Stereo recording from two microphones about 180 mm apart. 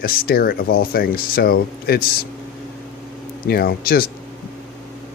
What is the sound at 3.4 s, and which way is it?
Speech, 60° left (ahead or behind).